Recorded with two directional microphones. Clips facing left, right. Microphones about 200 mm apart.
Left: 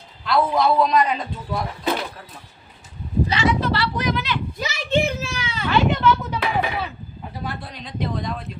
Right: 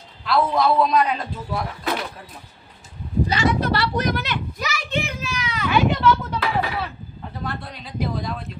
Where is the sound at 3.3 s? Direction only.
40° right (ahead or behind).